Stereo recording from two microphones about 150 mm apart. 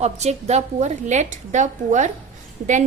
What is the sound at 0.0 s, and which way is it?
A woman's voice, 50° right (ahead or behind).